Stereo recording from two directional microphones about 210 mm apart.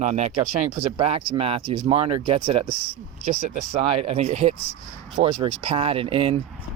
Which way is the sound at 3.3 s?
35° right (ahead or behind).